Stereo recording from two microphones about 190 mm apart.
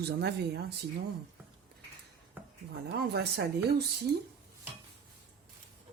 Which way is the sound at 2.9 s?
60° right (ahead or behind).